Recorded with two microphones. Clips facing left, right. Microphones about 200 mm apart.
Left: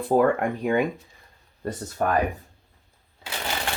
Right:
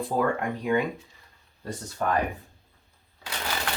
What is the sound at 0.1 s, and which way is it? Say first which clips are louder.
Speech: left 7 dB; 55° left (ahead or behind).